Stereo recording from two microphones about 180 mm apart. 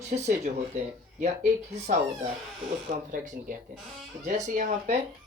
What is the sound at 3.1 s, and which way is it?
Speech, 45° right (ahead or behind).